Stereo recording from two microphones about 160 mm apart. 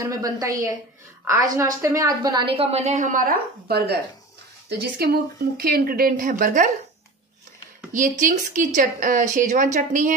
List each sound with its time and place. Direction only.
0.0 s a woman's voice: 20° right (ahead or behind)
2.5 s speech: 40° right (ahead or behind)
7.9 s a woman's voice: 55° right (ahead or behind)